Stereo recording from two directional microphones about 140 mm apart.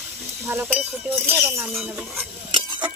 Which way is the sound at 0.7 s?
5° right (ahead or behind).